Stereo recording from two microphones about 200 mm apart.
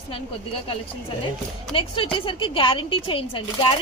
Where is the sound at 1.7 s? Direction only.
25° left (ahead or behind).